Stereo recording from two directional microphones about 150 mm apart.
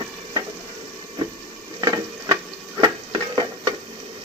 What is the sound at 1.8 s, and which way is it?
Stir, 25° right (ahead or behind).